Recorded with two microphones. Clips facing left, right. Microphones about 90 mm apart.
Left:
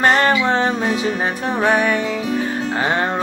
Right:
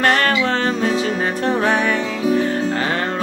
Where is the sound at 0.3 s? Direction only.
20° left (ahead or behind).